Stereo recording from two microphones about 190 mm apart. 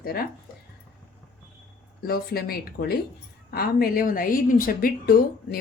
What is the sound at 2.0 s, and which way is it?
A woman's voice, 50° left (ahead or behind).